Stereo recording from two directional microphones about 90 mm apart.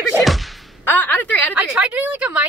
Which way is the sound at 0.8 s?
20° left (ahead or behind).